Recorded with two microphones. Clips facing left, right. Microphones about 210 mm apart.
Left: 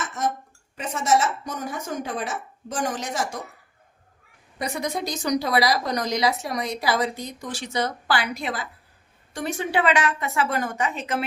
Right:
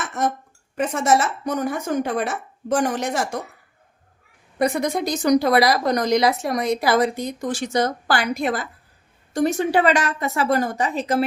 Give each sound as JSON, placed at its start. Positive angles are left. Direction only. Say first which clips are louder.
{"t": 0.8, "sound": "a woman's voice", "louder": "right 3 dB", "side_deg": -60}
{"t": 4.5, "sound": "a woman's voice", "louder": "right 7 dB", "side_deg": -55}